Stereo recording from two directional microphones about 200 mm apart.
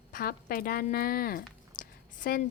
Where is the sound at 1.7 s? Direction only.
45° left (ahead or behind).